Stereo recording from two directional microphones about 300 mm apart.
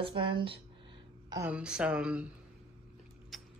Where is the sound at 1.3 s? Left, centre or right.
Centre.